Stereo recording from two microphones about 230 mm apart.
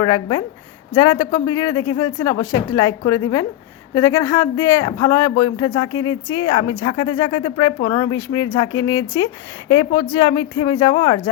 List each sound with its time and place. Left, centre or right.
0.0 s a woman's voice: centre